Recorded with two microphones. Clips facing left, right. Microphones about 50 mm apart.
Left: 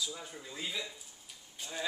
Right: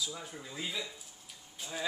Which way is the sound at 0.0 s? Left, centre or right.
Centre.